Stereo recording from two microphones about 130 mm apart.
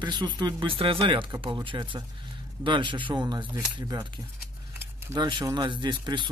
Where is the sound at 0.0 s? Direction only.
35° right (ahead or behind).